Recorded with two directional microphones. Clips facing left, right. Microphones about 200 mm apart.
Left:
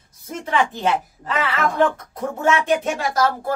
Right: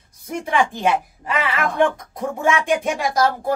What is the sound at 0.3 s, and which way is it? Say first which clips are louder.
A woman's voice: right 1 dB; 10° right (ahead or behind).